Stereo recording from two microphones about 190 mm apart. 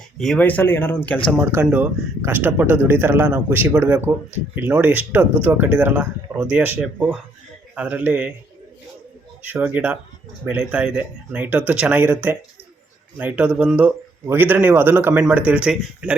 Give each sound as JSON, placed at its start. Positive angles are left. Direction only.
{"t": 0.2, "sound": "speech", "side_deg": 5}
{"t": 1.4, "sound": "speech", "side_deg": -10}
{"t": 9.4, "sound": "speech", "side_deg": -10}